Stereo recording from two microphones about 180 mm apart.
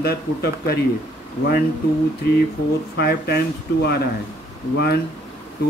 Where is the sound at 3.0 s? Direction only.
60° left (ahead or behind).